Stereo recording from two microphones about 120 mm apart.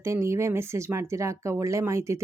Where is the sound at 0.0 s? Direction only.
25° right (ahead or behind).